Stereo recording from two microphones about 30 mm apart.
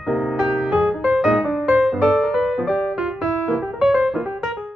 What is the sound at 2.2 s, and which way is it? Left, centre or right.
Music, centre.